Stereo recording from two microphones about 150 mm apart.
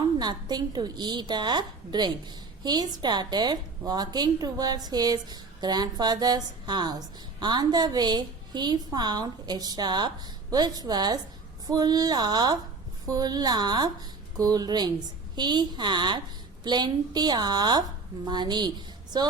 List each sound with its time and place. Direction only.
0.2 s a woman's voice: 30° right (ahead or behind)